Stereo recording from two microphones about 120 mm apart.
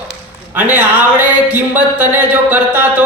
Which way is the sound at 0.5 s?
10° right (ahead or behind).